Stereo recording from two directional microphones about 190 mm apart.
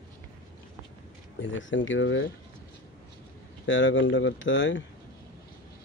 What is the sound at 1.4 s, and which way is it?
Speech, 85° left.